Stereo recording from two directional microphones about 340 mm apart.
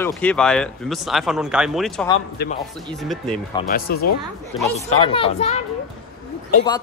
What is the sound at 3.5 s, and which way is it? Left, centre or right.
Speech, left.